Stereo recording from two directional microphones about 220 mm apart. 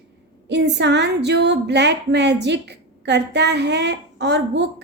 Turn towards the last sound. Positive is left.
turn(degrees=-50)  # may be behind; listen again after turning